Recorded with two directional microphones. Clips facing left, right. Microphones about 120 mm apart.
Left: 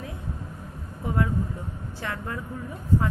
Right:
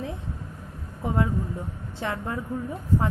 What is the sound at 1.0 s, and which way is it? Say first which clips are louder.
A woman's voice: right 1 dB; 25° right (ahead or behind).